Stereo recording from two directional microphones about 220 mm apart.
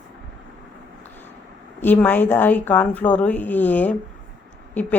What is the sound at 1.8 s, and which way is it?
A woman's voice, 10° left (ahead or behind).